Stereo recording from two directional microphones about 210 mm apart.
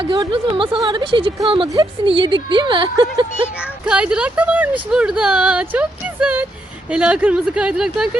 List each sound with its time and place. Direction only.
0.0 s speech: 25° right (ahead or behind)
3.6 s speech: 5° right (ahead or behind)